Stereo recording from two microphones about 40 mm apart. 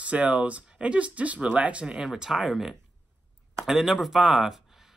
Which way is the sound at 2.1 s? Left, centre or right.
Centre.